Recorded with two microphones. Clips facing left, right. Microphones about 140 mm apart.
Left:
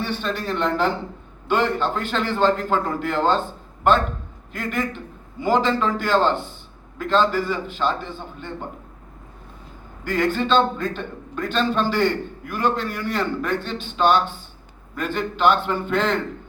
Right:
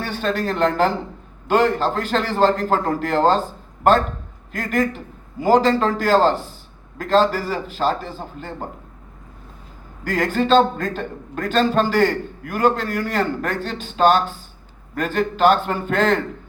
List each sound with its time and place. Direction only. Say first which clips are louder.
0.0 s a man's voice: right 3 dB; 45° right (ahead or behind)
4.5 s a man's voice: right 5 dB; 40° right (ahead or behind)
10.0 s a man's voice: right 1 dB; 40° right (ahead or behind)